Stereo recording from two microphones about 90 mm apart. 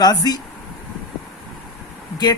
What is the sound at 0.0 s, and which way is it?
Speech, 45° left (ahead or behind).